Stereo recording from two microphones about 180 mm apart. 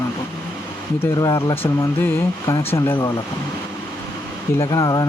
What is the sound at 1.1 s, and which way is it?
Speech, 25° left (ahead or behind).